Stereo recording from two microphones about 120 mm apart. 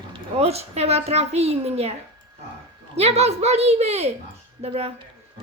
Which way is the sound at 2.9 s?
60° right (ahead or behind).